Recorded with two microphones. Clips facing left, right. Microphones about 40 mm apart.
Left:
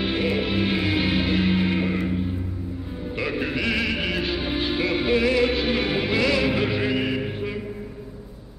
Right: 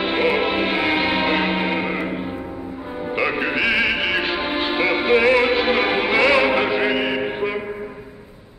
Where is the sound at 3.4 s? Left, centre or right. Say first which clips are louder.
Right 5 dB; centre.